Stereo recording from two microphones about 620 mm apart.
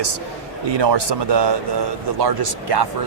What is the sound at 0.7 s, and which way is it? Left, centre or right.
Speech, right.